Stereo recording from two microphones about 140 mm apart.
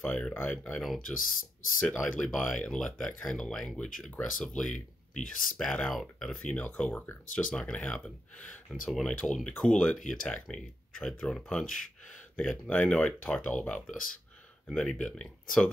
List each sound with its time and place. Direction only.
0.0 s speech: 10° left (ahead or behind)
4.7 s speech: 60° left (ahead or behind)
5.6 s speech: 5° left (ahead or behind)